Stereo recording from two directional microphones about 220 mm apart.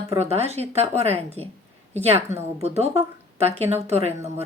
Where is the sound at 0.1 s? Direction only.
30° right (ahead or behind).